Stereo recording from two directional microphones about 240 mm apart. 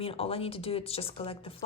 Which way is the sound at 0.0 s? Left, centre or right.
Left.